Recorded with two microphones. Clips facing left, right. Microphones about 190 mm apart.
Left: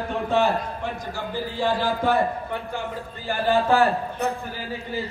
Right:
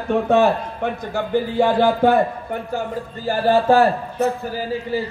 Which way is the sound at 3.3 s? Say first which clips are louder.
Right 5 dB; 40° right (ahead or behind).